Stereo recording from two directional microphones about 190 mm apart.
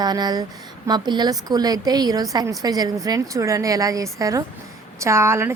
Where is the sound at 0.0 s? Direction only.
20° right (ahead or behind).